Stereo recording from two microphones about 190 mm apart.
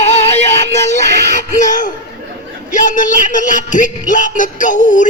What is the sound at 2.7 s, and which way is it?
Music, 40° left (ahead or behind).